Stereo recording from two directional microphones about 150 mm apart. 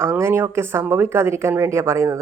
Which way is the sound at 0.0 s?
15° right (ahead or behind).